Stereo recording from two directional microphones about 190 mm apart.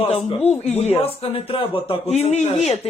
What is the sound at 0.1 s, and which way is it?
Speech, 30° left (ahead or behind).